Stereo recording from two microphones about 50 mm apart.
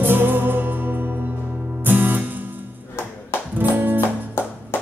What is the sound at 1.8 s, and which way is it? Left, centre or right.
Music, right.